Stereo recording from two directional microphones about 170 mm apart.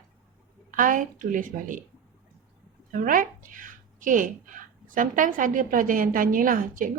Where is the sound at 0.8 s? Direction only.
50° right (ahead or behind).